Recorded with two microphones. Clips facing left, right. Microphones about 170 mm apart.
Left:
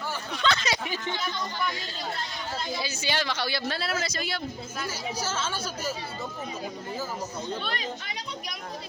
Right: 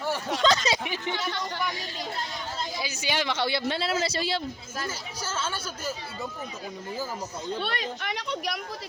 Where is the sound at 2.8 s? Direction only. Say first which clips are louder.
Right 2 dB; 15° right (ahead or behind); by 4.4 s 30° right (ahead or behind).